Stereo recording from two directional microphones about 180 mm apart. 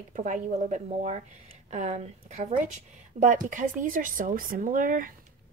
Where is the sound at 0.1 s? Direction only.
45° right (ahead or behind).